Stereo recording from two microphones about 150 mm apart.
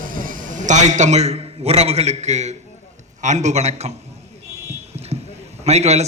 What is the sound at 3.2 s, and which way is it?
Speech, 50° right (ahead or behind).